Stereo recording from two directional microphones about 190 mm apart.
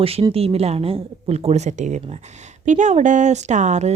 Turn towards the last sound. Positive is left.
turn(degrees=-35)  # may be behind; listen again after turning